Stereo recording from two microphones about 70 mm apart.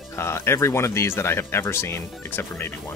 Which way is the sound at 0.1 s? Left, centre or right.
Left.